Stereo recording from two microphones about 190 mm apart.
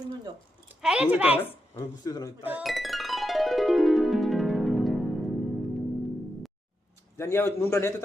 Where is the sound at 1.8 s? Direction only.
20° left (ahead or behind).